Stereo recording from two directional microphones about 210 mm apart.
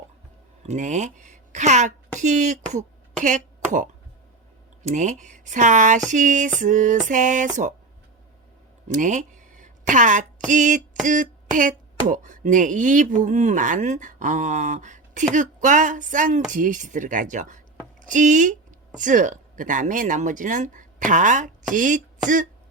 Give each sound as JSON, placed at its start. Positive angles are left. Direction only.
{"t": 0.6, "sound": "speech", "side_deg": -35}
{"t": 8.9, "sound": "speech", "side_deg": -35}